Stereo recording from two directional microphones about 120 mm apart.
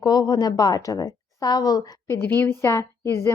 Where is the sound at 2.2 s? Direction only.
15° left (ahead or behind).